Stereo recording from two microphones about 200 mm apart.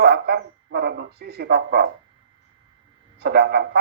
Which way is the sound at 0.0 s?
55° right (ahead or behind).